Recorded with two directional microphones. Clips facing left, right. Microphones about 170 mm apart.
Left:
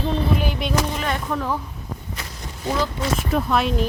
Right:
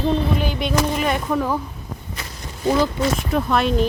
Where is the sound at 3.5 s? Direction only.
Centre (ahead or behind).